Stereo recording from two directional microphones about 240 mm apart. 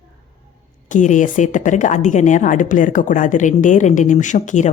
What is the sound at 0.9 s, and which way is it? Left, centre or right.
Speech, left.